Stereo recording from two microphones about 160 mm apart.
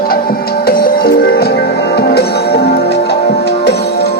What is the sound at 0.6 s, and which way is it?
Music, 75° left (ahead or behind).